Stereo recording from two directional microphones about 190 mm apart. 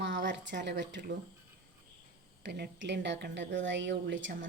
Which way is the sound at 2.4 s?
65° right (ahead or behind).